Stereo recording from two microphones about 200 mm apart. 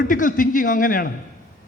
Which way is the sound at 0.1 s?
40° left (ahead or behind).